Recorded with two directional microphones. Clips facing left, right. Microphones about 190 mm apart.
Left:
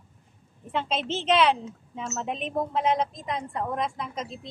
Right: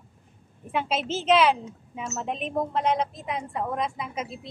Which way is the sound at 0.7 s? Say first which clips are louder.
Right 1 dB; 5° right (ahead or behind).